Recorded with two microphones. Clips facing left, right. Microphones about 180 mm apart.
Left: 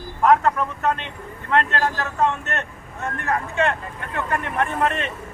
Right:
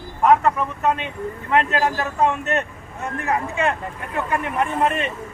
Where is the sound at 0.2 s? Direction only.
5° right (ahead or behind).